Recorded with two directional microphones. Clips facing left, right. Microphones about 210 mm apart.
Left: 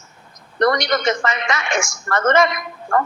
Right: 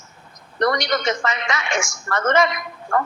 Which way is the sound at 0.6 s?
50° left (ahead or behind).